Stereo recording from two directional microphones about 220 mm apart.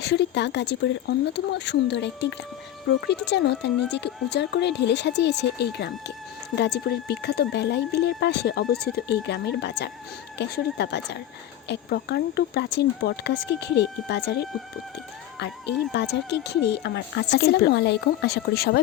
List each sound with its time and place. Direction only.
0.0 s speech: 50° left (ahead or behind)
15.4 s speech: 50° left (ahead or behind)